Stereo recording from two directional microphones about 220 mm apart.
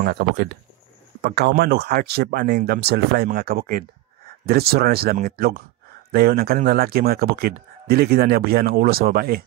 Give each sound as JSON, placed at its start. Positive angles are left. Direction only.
{"t": 0.0, "sound": "speech", "side_deg": -45}